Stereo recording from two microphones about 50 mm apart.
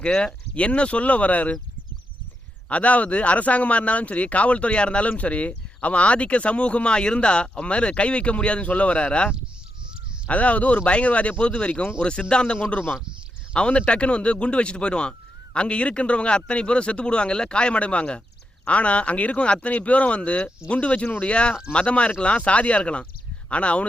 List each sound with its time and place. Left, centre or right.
0.1 s speech: centre
0.5 s speech: left
2.6 s speech: left